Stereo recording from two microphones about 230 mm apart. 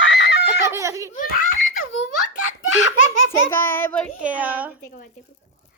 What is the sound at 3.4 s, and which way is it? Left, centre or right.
Speech, centre.